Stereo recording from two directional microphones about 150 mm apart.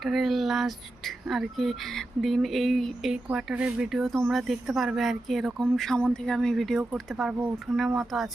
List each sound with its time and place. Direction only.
0.0 s speech: centre (ahead or behind)